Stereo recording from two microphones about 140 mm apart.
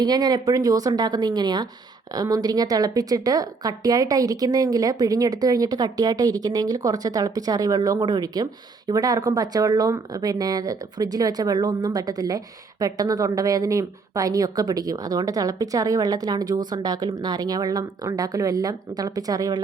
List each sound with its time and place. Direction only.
0.0 s a woman's voice: 30° right (ahead or behind)